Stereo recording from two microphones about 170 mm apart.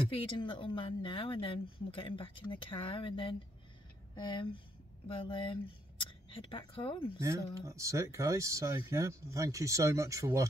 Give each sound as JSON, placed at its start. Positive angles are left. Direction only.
{"t": 0.1, "sound": "speech", "side_deg": 30}
{"t": 7.2, "sound": "speech", "side_deg": -20}